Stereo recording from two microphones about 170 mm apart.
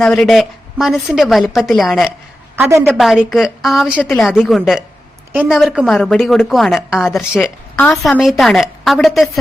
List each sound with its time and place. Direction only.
0.0 s a woman's voice: 5° left (ahead or behind)
2.6 s a woman's voice: 15° right (ahead or behind)
2.8 s a woman's voice: centre (ahead or behind)